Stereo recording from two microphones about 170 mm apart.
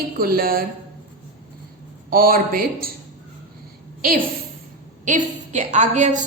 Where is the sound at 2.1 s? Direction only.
60° right (ahead or behind).